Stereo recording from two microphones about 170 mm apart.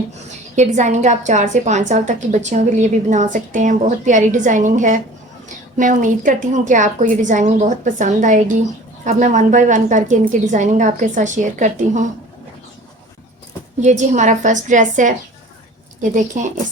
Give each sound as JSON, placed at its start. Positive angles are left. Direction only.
{"t": 0.5, "sound": "a woman's voice", "side_deg": -45}
{"t": 13.8, "sound": "a woman's voice", "side_deg": -45}